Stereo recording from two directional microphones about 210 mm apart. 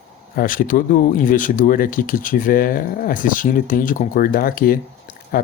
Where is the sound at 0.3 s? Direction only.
40° left (ahead or behind).